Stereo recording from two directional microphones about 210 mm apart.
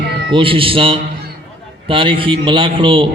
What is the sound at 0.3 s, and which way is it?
A man's voice, 25° right (ahead or behind).